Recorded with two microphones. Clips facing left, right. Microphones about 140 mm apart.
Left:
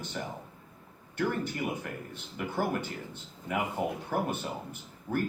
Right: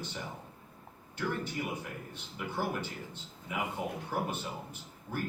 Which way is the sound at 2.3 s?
55° left (ahead or behind).